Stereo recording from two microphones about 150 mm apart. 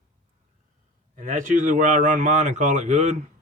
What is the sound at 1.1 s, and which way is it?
Speech, 60° right (ahead or behind).